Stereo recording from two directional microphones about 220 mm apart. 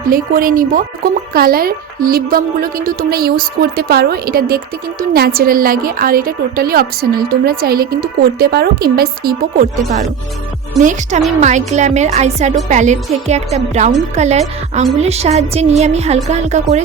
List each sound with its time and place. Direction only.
0.0 s speech: 40° right (ahead or behind)
11.3 s a woman's voice: 30° right (ahead or behind)